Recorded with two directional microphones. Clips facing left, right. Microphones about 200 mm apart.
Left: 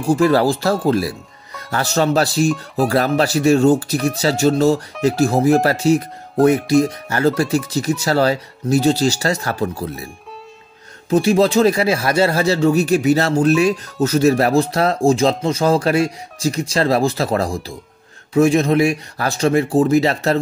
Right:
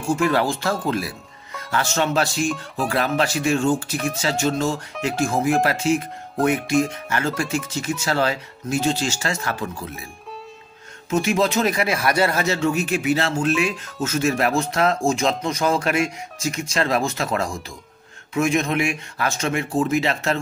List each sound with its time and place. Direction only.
0.1 s speech: 35° left (ahead or behind)
11.1 s speech: 35° left (ahead or behind)